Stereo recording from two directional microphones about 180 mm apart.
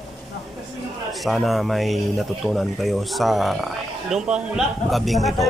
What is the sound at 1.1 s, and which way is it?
Speech, centre (ahead or behind).